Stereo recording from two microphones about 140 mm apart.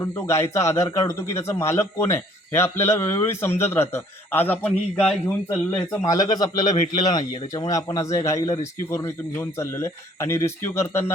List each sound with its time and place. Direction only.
0.0 s speech: 20° left (ahead or behind)
6.1 s speech: 25° left (ahead or behind)